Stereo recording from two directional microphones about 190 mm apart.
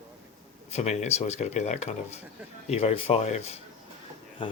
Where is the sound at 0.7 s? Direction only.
35° left (ahead or behind).